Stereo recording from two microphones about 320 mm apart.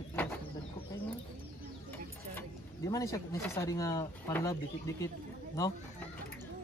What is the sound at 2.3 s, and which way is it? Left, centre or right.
Speech, centre.